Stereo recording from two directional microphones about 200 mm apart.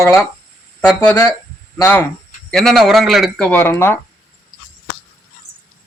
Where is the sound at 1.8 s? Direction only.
10° left (ahead or behind).